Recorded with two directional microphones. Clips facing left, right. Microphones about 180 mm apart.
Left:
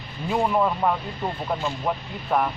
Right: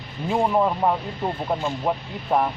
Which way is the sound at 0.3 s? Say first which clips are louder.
Right 1 dB; 25° right (ahead or behind).